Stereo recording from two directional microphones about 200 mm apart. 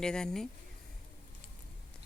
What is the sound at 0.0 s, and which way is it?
Speech, 5° left (ahead or behind).